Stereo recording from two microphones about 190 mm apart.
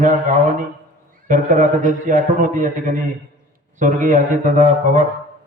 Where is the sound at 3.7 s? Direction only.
40° right (ahead or behind).